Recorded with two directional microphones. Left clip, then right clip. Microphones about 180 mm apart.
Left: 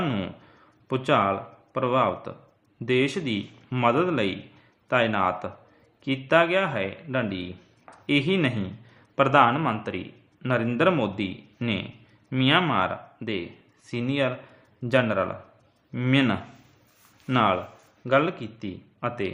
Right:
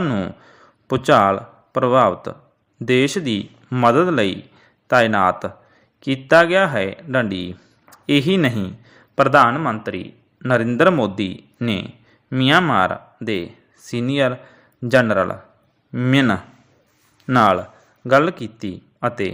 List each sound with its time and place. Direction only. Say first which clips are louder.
0.0 s a man's voice: right 6 dB; 35° right (ahead or behind)
9.6 s a man's voice: right 5 dB; 20° right (ahead or behind); by 19.3 s 40° right (ahead or behind)